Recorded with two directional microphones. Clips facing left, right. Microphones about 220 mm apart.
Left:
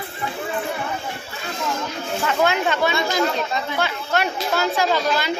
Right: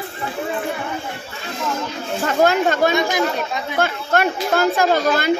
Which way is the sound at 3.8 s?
50° right (ahead or behind).